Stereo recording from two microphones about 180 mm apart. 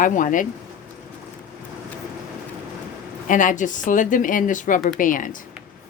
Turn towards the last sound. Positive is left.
turn(degrees=50)  # may be behind; listen again after turning